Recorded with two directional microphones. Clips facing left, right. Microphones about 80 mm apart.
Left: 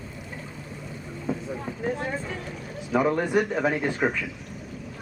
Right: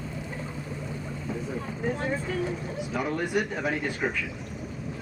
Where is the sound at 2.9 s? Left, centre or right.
Left.